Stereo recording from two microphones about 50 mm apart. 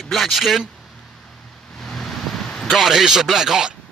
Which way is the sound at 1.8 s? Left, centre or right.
Centre.